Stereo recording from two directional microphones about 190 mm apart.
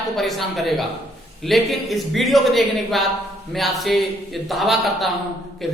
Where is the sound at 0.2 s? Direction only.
Centre (ahead or behind).